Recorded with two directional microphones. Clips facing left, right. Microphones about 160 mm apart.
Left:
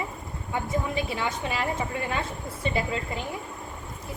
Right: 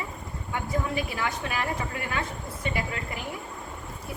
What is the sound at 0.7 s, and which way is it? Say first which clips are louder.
A woman's voice: even; 25° left (ahead or behind).